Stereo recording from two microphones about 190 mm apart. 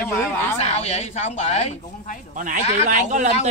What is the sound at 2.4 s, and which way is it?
Speech, 40° right (ahead or behind).